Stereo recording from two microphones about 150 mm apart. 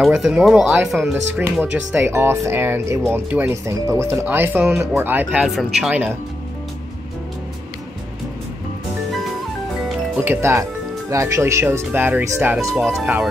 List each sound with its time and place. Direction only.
0.0 s speech: 5° right (ahead or behind)
2.0 s speech: 15° right (ahead or behind)
10.2 s speech: 15° right (ahead or behind)
12.7 s speech: centre (ahead or behind)